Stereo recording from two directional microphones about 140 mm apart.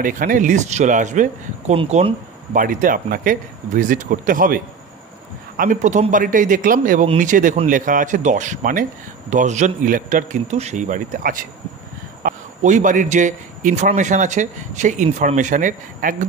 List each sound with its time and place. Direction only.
0.0 s a man's voice: 75° right (ahead or behind); by 1.8 s 60° right (ahead or behind)
1.8 s speech: 45° right (ahead or behind)
2.5 s speech: 75° right (ahead or behind)
5.6 s speech: 65° right (ahead or behind)
9.3 s a man's voice: 60° right (ahead or behind)
12.2 s a man's voice: 70° right (ahead or behind)